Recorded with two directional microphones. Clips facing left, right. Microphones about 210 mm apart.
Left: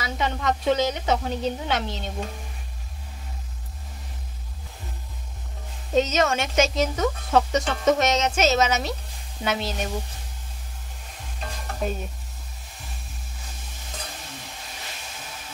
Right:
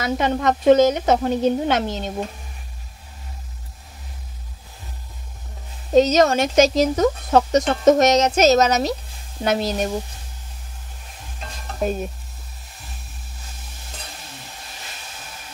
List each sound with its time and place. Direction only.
0.0 s a woman's voice: 50° right (ahead or behind)
5.9 s speech: 35° right (ahead or behind)